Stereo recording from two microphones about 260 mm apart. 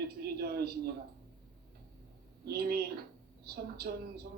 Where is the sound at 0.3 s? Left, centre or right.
Right.